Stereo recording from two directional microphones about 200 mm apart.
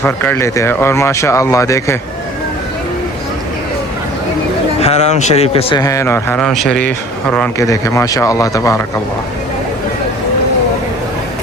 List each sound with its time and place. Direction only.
0.0 s speech: 10° left (ahead or behind)
4.8 s a man's voice: 35° left (ahead or behind); by 8.8 s 15° left (ahead or behind)